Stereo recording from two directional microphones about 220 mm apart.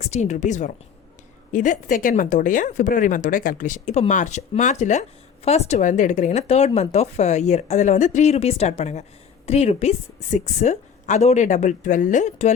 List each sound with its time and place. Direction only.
0.0 s a woman's voice: 30° left (ahead or behind)